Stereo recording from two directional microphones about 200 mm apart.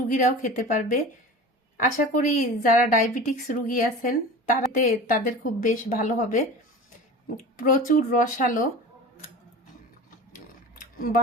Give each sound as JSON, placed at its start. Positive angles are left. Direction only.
{"t": 0.1, "sound": "speech", "side_deg": 40}
{"t": 2.0, "sound": "a woman's voice", "side_deg": 45}
{"t": 7.6, "sound": "speech", "side_deg": 40}
{"t": 10.9, "sound": "speech", "side_deg": 40}